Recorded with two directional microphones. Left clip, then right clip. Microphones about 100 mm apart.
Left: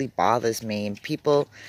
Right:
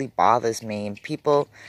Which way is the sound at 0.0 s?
30° left (ahead or behind).